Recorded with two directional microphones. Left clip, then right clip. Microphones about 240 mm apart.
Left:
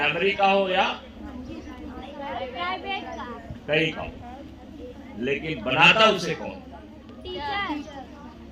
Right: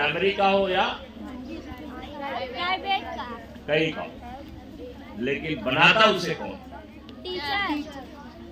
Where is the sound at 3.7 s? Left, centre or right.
Centre.